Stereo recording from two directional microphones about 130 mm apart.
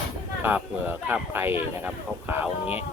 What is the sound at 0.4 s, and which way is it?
Speech, 15° right (ahead or behind).